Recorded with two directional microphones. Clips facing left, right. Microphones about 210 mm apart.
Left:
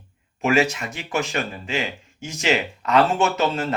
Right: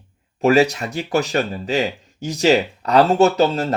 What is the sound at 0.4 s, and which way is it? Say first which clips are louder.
Speech: right 5 dB; 35° right (ahead or behind).